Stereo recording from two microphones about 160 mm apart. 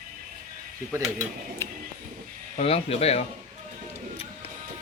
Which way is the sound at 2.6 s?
40° left (ahead or behind).